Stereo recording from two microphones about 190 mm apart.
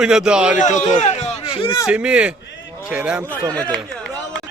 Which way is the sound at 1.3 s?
30° left (ahead or behind).